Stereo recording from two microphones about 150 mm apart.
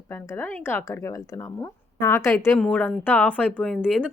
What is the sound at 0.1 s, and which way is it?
A woman's voice, 15° left (ahead or behind).